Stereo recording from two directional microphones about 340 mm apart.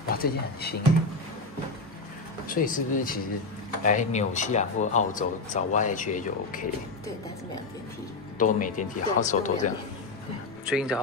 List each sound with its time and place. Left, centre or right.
0.1 s speech: left
2.4 s speech: left
8.4 s speech: left
10.6 s speech: centre